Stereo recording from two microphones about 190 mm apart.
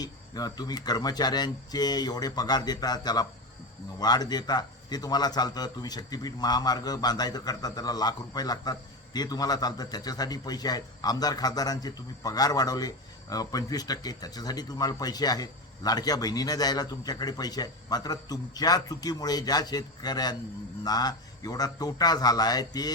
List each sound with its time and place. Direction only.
0.0 s speech: 20° left (ahead or behind)